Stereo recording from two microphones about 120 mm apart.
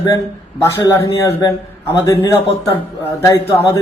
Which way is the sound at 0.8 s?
30° left (ahead or behind).